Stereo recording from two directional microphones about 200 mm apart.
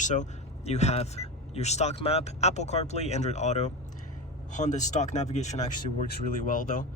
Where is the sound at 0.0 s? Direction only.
35° left (ahead or behind).